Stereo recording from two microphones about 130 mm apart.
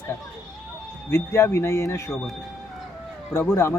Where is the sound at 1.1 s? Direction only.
20° left (ahead or behind).